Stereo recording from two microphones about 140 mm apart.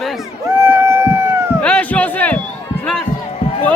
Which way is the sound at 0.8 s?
20° right (ahead or behind).